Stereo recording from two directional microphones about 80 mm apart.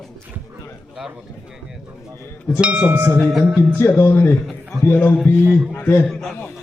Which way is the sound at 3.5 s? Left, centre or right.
Right.